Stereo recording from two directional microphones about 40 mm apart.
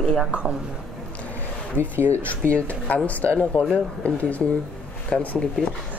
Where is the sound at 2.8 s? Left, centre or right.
Left.